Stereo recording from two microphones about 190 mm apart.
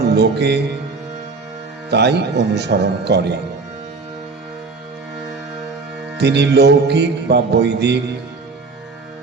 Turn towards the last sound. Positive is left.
turn(degrees=-60)  # may be behind; listen again after turning